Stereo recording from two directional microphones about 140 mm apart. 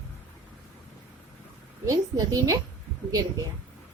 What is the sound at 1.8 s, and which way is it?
Speech, 25° right (ahead or behind).